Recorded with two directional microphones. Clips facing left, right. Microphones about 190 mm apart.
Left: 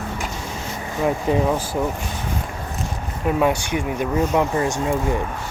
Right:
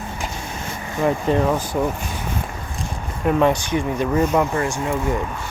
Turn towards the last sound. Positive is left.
turn(degrees=20)  # may be behind; listen again after turning